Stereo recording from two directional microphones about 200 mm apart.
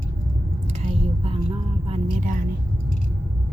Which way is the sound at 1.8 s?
30° right (ahead or behind).